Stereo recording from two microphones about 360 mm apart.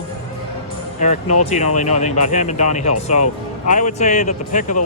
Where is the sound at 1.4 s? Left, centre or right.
Centre.